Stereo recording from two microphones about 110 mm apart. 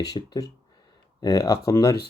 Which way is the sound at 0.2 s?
50° left (ahead or behind).